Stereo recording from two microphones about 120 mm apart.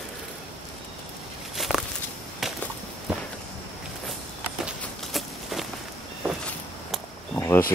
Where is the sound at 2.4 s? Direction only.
Centre (ahead or behind).